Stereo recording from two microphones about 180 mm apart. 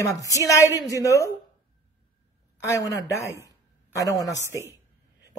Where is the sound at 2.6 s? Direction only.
15° left (ahead or behind).